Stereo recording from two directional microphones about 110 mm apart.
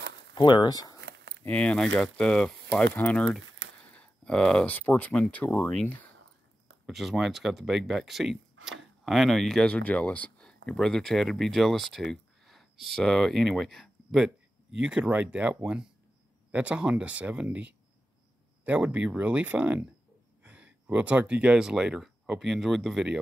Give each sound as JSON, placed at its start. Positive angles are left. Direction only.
{"t": 0.3, "sound": "speech", "side_deg": 45}
{"t": 1.4, "sound": "speech", "side_deg": 10}
{"t": 6.9, "sound": "speech", "side_deg": 0}